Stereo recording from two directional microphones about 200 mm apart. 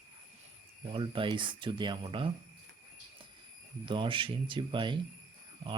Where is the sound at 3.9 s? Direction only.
25° right (ahead or behind).